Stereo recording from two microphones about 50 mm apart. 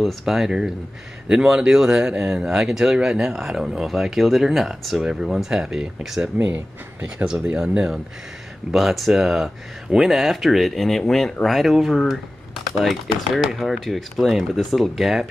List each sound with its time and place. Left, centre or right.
0.0 s speech: centre
6.3 s speech: right
7.5 s speech: centre